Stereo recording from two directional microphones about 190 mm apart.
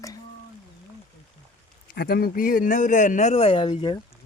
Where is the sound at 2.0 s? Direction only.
55° left (ahead or behind); by 4.0 s 25° left (ahead or behind).